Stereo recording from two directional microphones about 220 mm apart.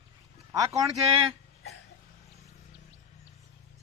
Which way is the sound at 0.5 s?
15° right (ahead or behind).